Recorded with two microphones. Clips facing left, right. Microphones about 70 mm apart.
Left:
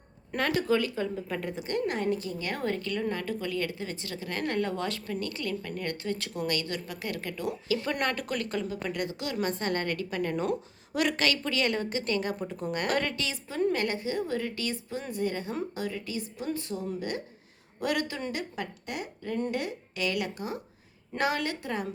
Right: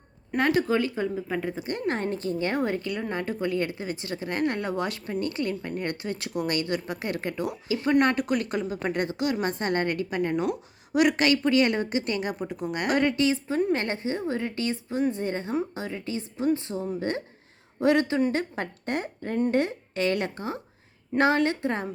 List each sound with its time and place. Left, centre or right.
0.3 s a woman's voice: right
1.1 s a woman's voice: centre
1.5 s a woman's voice: right
1.9 s a woman's voice: right
2.6 s a woman's voice: centre
8.8 s a woman's voice: right
18.3 s a woman's voice: right